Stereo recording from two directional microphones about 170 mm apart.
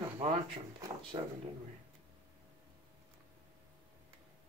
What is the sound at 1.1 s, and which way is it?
Speech, 35° right (ahead or behind).